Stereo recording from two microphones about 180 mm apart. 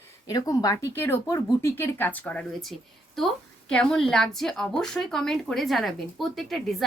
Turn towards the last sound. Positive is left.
turn(degrees=0)  # may be behind; listen again after turning